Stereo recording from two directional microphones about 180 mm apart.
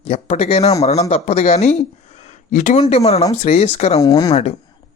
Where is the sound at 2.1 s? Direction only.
40° left (ahead or behind).